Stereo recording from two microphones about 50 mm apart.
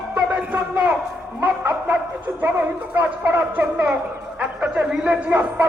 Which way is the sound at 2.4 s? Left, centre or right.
Right.